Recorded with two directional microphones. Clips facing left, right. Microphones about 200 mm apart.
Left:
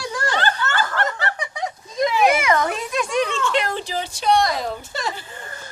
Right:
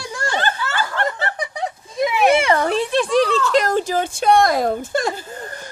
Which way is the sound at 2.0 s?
5° right (ahead or behind).